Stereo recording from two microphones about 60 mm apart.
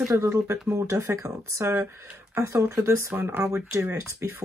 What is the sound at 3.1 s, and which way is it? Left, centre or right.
Speech, right.